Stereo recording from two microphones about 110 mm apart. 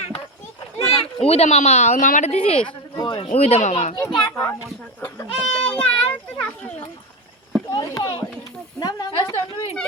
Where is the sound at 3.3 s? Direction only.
65° left (ahead or behind); by 3.9 s 85° left.